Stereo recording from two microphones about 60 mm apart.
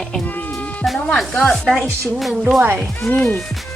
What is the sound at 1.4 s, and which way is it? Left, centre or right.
Speech, centre.